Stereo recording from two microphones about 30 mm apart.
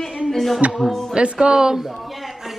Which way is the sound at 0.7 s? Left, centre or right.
Centre.